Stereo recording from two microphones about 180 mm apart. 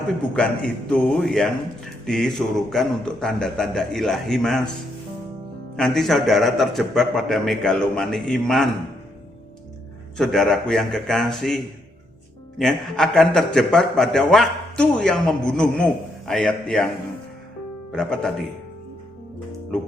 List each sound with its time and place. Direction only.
0.2 s speech: 5° left (ahead or behind)
5.7 s speech: 5° left (ahead or behind)
10.2 s speech: 5° left (ahead or behind)
17.9 s speech: 5° left (ahead or behind)